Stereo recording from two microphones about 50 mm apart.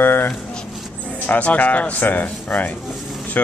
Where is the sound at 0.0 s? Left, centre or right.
Left.